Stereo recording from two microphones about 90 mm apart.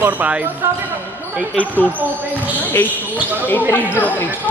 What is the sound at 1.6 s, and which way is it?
Speech, 15° left (ahead or behind).